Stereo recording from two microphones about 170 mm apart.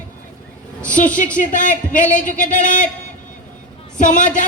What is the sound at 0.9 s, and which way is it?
A man's voice, 50° left (ahead or behind).